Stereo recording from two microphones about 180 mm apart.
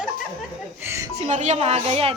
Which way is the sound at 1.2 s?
40° right (ahead or behind).